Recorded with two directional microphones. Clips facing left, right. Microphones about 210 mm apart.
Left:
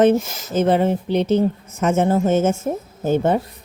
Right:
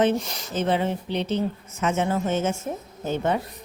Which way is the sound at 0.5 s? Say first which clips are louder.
Left 7 dB; 45° left (ahead or behind).